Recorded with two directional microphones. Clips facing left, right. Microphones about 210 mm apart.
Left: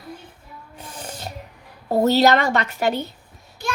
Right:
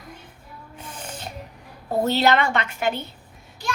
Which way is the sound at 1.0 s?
35° left (ahead or behind).